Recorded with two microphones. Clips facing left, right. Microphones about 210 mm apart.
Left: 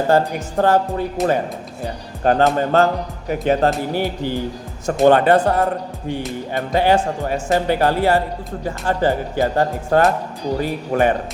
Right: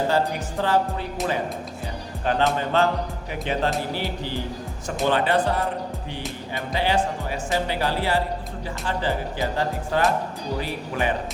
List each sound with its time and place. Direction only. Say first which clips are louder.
0.1 s speech: left 6 dB; 50° left (ahead or behind)